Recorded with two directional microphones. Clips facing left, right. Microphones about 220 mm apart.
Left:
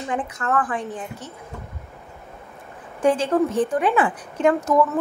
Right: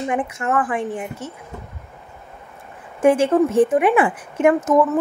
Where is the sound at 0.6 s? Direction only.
25° right (ahead or behind).